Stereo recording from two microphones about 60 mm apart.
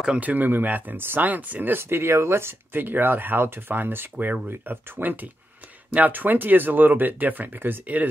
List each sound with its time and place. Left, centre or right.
0.2 s speech: right